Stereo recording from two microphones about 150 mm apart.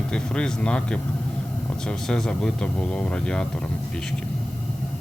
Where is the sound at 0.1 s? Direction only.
5° left (ahead or behind).